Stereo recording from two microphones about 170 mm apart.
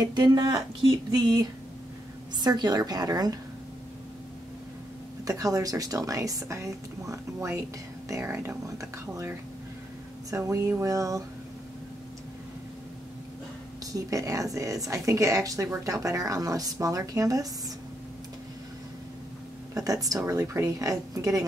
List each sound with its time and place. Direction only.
0.0 s speech: 25° right (ahead or behind)
5.2 s speech: 20° right (ahead or behind)
10.3 s speech: 15° right (ahead or behind)
13.9 s speech: 20° right (ahead or behind)
19.7 s speech: 20° right (ahead or behind)